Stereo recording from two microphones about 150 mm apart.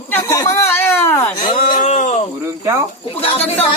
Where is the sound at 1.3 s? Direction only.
35° left (ahead or behind).